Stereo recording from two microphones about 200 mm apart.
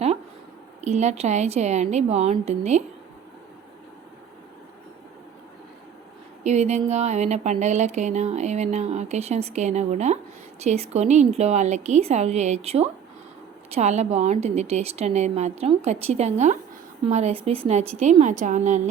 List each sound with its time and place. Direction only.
0.9 s speech: 35° right (ahead or behind)
6.4 s speech: 35° right (ahead or behind)